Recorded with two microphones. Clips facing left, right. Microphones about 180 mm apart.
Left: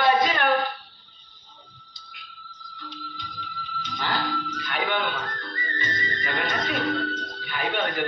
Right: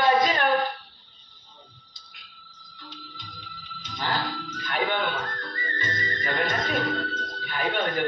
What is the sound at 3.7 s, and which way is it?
Music, 40° right (ahead or behind).